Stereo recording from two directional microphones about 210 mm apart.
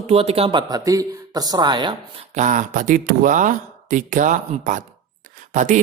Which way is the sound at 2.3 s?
35° right (ahead or behind).